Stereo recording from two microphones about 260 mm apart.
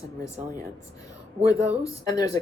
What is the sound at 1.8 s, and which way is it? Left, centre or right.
Speech, centre.